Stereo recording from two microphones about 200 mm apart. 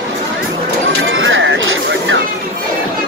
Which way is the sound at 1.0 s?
70° right (ahead or behind).